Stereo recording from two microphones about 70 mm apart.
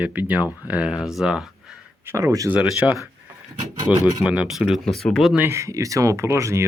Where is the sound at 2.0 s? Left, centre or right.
Right.